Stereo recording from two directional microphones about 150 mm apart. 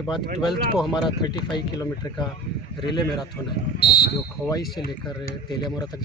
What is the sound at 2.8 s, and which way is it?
Speech, 30° left (ahead or behind).